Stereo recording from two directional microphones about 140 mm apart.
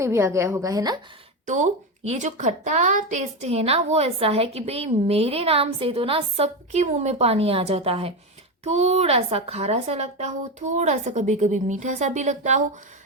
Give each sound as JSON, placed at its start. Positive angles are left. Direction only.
{"t": 0.0, "sound": "a woman's voice", "side_deg": -20}
{"t": 1.5, "sound": "a woman's voice", "side_deg": -60}